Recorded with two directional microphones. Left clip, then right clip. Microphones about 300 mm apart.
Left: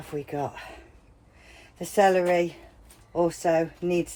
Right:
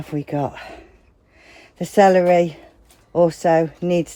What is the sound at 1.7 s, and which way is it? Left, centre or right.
Speech, right.